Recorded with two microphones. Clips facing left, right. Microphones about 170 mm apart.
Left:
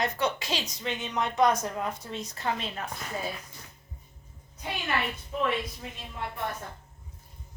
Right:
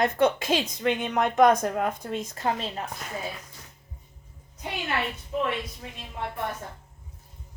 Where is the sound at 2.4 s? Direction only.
40° right (ahead or behind).